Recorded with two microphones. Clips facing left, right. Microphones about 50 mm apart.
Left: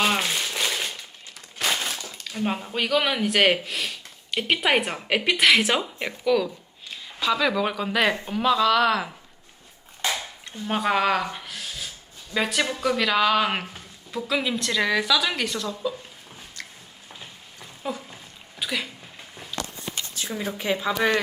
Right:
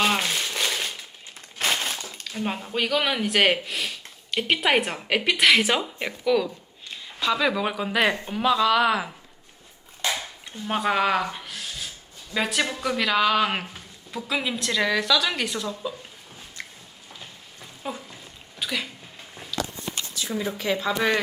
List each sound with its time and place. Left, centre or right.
0.0 s crumpling: centre
1.6 s a sound: right
2.2 s speech: centre
16.6 s a sound: right
17.8 s speech: centre
18.5 s a sound: centre
20.3 s speech: centre
20.6 s speech: centre
20.9 s speech: centre